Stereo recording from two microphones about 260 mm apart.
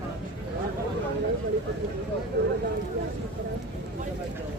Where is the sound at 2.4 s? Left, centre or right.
Right.